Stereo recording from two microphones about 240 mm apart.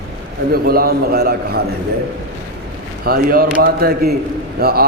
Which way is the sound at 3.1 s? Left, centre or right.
Right.